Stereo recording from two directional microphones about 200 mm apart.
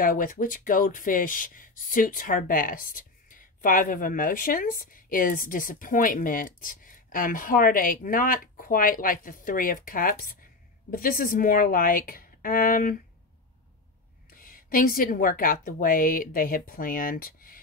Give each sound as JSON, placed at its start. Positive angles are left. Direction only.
{"t": 0.0, "sound": "speech", "side_deg": 45}
{"t": 14.3, "sound": "speech", "side_deg": 45}